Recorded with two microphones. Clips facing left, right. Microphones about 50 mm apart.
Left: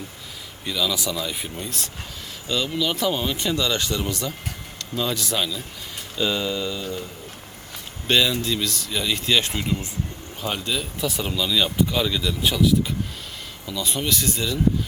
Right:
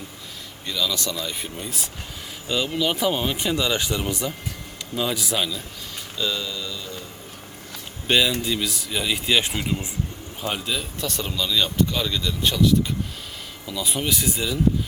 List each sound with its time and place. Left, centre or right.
0.6 s speech: centre
2.5 s speech: centre
6.1 s speech: left
8.0 s speech: centre